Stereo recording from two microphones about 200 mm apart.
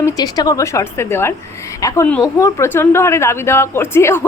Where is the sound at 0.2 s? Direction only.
20° left (ahead or behind).